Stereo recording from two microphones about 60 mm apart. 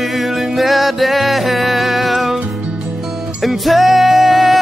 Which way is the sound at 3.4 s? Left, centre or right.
Centre.